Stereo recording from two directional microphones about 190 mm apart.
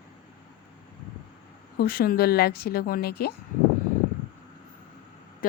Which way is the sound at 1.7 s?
50° left (ahead or behind).